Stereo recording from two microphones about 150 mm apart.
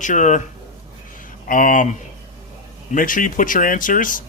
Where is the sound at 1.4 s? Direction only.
65° left (ahead or behind).